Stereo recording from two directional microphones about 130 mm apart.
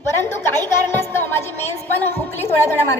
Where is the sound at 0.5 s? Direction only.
15° left (ahead or behind).